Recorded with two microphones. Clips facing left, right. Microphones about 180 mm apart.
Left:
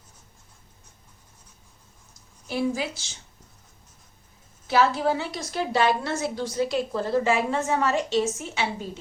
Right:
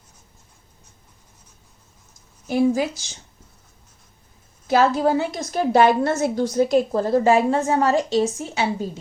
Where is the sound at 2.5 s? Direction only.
45° right (ahead or behind).